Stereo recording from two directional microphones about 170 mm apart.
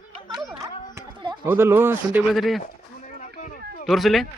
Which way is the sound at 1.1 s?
25° right (ahead or behind).